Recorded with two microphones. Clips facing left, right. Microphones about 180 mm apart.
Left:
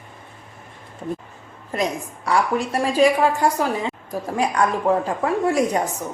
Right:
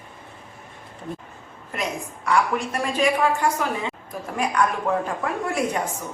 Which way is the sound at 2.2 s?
35° left (ahead or behind).